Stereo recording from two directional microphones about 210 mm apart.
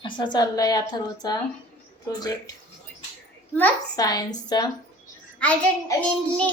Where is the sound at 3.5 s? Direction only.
15° left (ahead or behind).